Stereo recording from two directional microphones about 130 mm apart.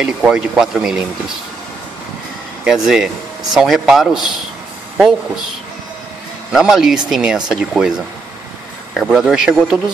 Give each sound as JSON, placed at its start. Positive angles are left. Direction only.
{"t": 0.0, "sound": "speech", "side_deg": -5}
{"t": 2.6, "sound": "speech", "side_deg": -5}
{"t": 6.5, "sound": "speech", "side_deg": -5}
{"t": 8.9, "sound": "speech", "side_deg": -5}